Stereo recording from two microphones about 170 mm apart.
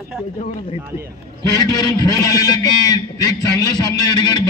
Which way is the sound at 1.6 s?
25° left (ahead or behind).